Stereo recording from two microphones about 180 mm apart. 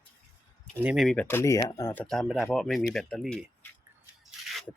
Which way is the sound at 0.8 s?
Centre (ahead or behind).